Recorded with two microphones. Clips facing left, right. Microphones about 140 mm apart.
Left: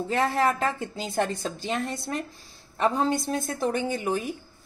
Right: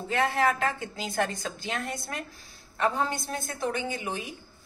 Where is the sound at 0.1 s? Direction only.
35° left (ahead or behind).